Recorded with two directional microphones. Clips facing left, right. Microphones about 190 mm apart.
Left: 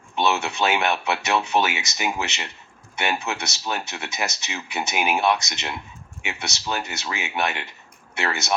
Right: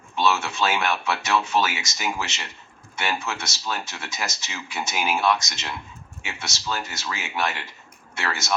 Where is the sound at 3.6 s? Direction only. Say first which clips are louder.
Left 2 dB; 20° left (ahead or behind).